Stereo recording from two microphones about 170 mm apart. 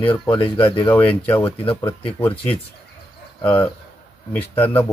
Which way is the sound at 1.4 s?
30° left (ahead or behind).